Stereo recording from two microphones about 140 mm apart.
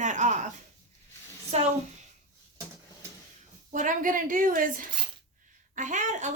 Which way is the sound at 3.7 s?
70° right (ahead or behind).